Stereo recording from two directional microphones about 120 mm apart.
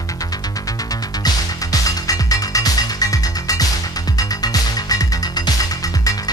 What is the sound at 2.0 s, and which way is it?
Music, 30° left (ahead or behind).